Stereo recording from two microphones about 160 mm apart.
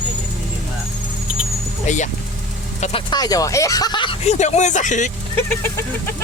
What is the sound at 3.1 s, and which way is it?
Speech, 25° left (ahead or behind).